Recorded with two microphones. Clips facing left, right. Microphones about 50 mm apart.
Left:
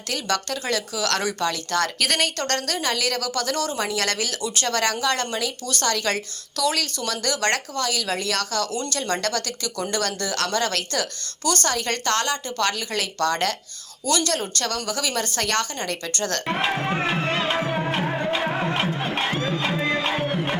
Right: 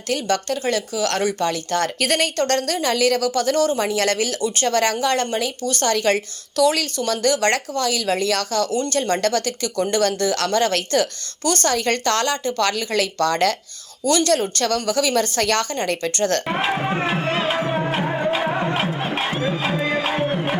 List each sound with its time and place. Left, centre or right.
0.1 s speech: centre
2.0 s speech: right
3.4 s speech: centre
3.8 s speech: right
16.5 s music: centre